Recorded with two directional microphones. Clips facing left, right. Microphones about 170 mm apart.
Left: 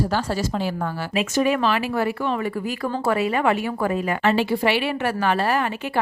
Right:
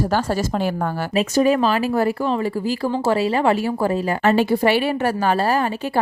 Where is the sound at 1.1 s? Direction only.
35° right (ahead or behind).